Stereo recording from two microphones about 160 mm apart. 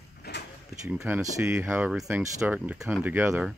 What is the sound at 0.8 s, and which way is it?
Speech, 15° right (ahead or behind).